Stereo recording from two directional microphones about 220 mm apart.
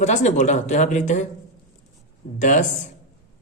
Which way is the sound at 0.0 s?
30° left (ahead or behind).